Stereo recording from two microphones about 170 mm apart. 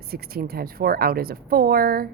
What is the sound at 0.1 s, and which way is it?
A woman's voice, 65° right (ahead or behind).